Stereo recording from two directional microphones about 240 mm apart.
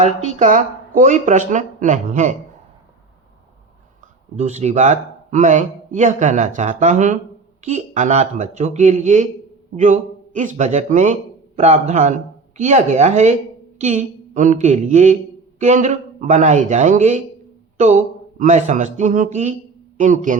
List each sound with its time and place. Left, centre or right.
0.0 s speech: right
4.4 s a woman's voice: right